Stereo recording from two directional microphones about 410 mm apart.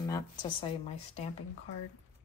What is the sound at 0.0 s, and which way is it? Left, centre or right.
A woman's voice, centre.